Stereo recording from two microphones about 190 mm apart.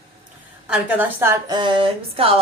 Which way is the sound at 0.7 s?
10° right (ahead or behind).